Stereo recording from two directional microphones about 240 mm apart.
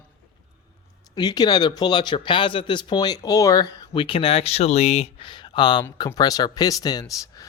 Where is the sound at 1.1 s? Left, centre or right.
Centre.